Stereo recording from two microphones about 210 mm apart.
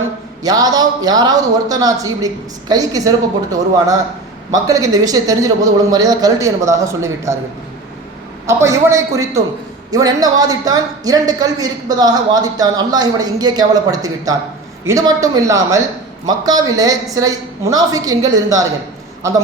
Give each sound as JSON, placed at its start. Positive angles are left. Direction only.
{"t": 0.4, "sound": "a woman's voice", "side_deg": -20}
{"t": 8.4, "sound": "a woman's voice", "side_deg": -15}